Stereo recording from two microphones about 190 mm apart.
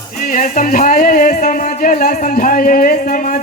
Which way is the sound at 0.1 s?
45° left (ahead or behind).